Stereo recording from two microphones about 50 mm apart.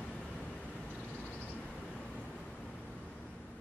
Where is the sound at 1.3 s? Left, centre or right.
Left.